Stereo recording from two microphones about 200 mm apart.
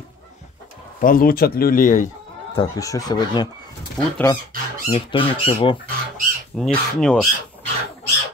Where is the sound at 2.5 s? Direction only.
15° left (ahead or behind).